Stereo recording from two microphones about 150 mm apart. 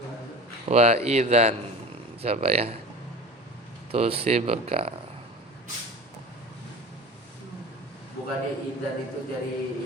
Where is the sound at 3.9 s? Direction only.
40° right (ahead or behind).